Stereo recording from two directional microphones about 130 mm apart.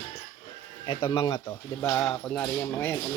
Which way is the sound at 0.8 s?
40° left (ahead or behind).